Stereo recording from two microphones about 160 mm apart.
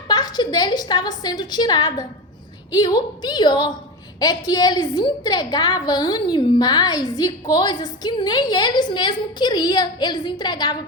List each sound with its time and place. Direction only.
0.1 s a woman's voice: 25° left (ahead or behind)